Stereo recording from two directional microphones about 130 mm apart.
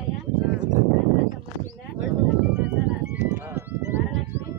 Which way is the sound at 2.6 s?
10° right (ahead or behind).